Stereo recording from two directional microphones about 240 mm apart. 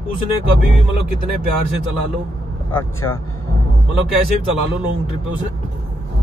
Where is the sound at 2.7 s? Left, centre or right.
Centre.